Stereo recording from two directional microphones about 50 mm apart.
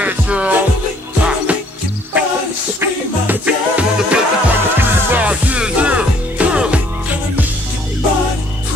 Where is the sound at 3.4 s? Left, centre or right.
Right.